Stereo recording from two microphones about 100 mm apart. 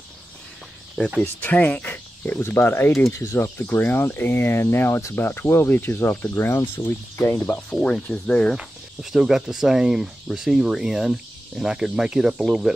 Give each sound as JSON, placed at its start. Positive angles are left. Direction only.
{"t": 1.2, "sound": "speech", "side_deg": 20}
{"t": 7.7, "sound": "speech", "side_deg": 10}
{"t": 8.5, "sound": "speech", "side_deg": -5}